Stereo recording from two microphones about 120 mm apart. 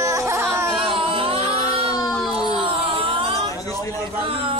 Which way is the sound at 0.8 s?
45° right (ahead or behind).